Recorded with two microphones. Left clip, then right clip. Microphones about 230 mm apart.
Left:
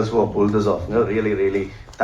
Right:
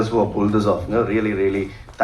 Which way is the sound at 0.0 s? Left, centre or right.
Right.